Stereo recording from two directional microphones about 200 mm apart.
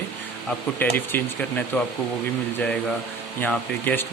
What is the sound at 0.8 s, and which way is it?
Speech, 10° left (ahead or behind).